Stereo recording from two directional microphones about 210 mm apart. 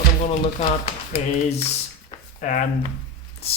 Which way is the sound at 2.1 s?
35° left (ahead or behind).